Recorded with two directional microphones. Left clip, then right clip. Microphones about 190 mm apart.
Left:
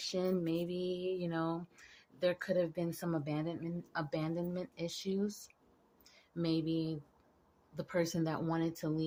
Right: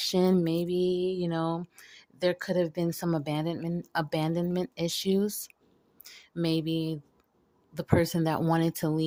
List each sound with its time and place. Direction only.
0.0 s speech: 55° right (ahead or behind)